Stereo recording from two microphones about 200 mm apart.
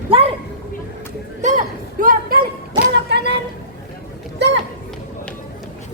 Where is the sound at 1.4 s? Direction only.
35° right (ahead or behind).